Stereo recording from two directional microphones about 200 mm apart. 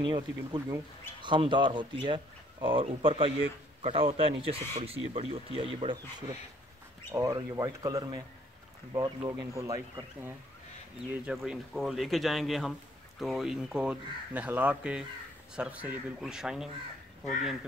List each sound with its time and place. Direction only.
0.0 s speech: 20° right (ahead or behind)
11.2 s speech: centre (ahead or behind)